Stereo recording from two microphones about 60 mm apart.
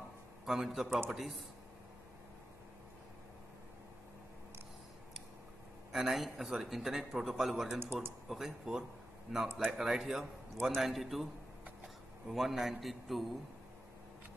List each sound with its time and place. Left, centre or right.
0.5 s a man's voice: centre
5.9 s a man's voice: centre
7.8 s speech: right
8.3 s a man's voice: centre
11.8 s a sound: centre
12.8 s a man's voice: centre